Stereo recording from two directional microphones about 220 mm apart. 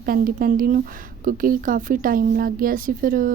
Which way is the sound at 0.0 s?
40° right (ahead or behind).